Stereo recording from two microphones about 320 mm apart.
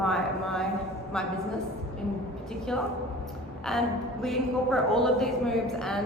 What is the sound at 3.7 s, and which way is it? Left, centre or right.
A woman's voice, centre.